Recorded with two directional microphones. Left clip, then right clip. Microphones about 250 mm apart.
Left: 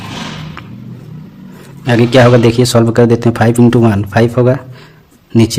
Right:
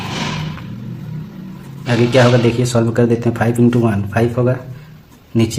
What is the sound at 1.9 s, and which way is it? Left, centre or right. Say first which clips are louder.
Speech: left 5 dB; left.